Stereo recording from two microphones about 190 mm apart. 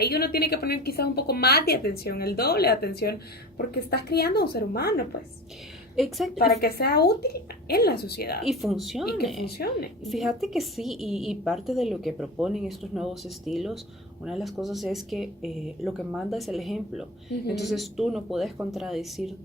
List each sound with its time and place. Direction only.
0.0 s a woman's voice: 55° left (ahead or behind)
6.0 s a woman's voice: centre (ahead or behind)
6.3 s a woman's voice: 55° left (ahead or behind)
8.4 s a woman's voice: centre (ahead or behind)
9.5 s a woman's voice: 55° left (ahead or behind)
10.0 s a woman's voice: centre (ahead or behind)